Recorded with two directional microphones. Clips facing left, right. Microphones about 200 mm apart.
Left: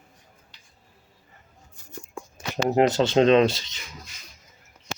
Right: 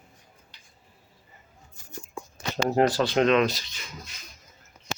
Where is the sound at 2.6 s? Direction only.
20° left (ahead or behind).